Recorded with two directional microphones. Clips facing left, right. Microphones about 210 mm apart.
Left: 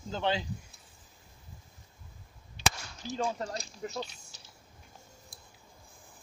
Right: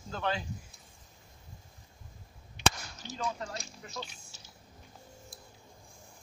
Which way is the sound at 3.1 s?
35° left (ahead or behind).